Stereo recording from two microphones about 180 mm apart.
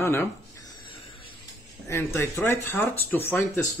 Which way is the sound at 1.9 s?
15° left (ahead or behind).